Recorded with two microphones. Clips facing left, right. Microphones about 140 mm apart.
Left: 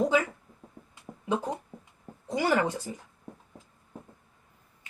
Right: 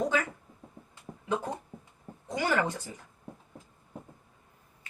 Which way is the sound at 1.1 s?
5° left (ahead or behind).